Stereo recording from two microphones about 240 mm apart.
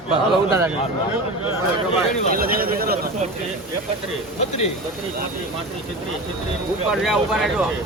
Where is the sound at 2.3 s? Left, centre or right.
Right.